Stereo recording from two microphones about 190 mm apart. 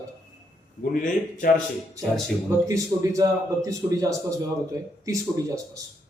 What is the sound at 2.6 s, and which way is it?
A man's voice, 15° right (ahead or behind).